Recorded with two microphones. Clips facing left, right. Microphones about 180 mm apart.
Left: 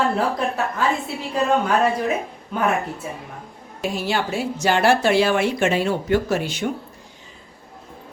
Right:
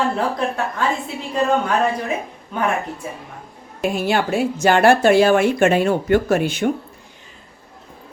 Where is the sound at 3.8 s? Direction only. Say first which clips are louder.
Right 4 dB; 55° right (ahead or behind).